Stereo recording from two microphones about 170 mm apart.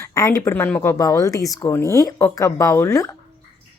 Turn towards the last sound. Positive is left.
turn(degrees=15)  # may be behind; listen again after turning